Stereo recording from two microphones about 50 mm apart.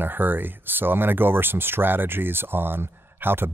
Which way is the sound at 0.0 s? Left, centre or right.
Right.